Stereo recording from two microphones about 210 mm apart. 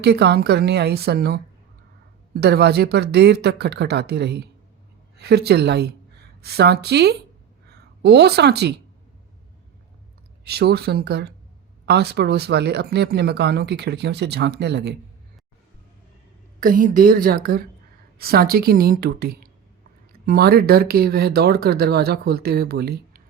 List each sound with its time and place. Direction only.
0.0 s speech: 50° right (ahead or behind)
10.4 s speech: 50° right (ahead or behind)
16.6 s speech: 40° right (ahead or behind)